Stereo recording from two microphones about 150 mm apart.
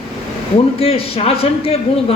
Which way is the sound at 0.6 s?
40° left (ahead or behind).